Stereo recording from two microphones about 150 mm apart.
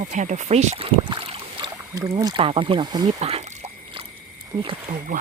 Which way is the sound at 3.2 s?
45° right (ahead or behind).